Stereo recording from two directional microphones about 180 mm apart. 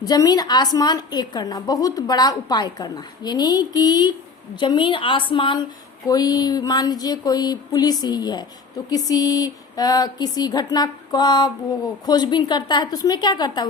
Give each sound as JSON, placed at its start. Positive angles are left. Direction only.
{"t": 0.0, "sound": "a woman's voice", "side_deg": 20}